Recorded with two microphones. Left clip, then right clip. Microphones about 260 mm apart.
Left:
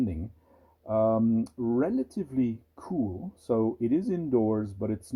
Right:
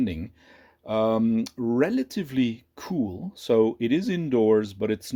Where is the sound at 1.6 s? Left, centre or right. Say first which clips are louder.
Right 5 dB; right.